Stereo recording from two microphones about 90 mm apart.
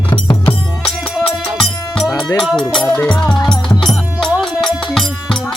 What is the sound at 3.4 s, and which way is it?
Music, 5° left (ahead or behind).